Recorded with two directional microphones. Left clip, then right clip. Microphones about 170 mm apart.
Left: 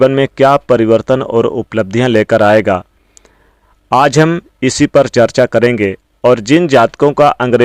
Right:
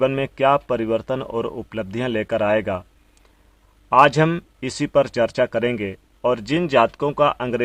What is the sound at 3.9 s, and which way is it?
Speech, 45° left (ahead or behind).